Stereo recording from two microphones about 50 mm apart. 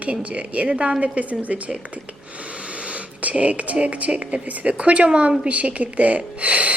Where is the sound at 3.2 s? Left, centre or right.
Right.